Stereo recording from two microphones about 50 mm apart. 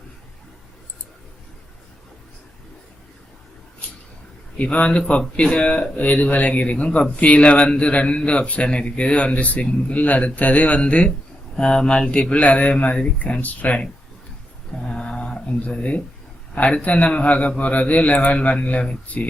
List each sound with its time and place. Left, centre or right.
4.5 s a man's voice: left
11.5 s a man's voice: centre
14.8 s a sound: centre
16.6 s a man's voice: left